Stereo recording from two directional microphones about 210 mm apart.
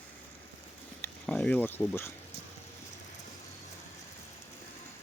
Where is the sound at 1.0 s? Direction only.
5° left (ahead or behind).